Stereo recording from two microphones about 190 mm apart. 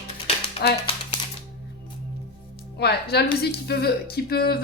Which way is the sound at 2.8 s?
60° left (ahead or behind).